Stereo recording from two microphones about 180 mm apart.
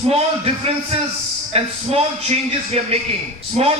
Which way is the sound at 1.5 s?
35° right (ahead or behind).